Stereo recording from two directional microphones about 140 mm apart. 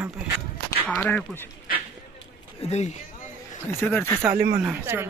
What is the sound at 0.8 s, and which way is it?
Speech, 10° left (ahead or behind).